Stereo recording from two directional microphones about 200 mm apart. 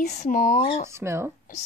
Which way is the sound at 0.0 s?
35° left (ahead or behind).